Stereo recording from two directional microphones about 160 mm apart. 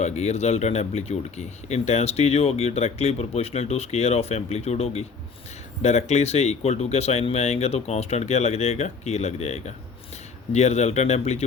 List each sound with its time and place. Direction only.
0.0 s speech: 45° left (ahead or behind)